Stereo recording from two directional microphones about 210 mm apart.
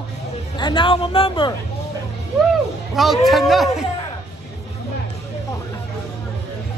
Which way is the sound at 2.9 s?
Centre (ahead or behind).